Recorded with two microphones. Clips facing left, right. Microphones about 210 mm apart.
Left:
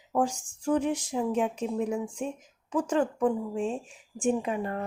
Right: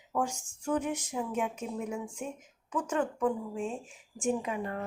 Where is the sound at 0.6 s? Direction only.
30° left (ahead or behind).